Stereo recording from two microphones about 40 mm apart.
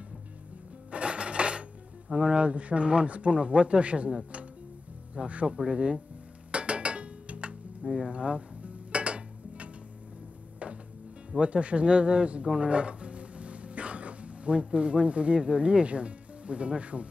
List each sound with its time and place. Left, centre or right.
0.9 s music: right
2.2 s speech: right
6.5 s a sound: right
7.8 s speech: centre
8.1 s cutlery: right
10.6 s music: right
11.4 s speech: right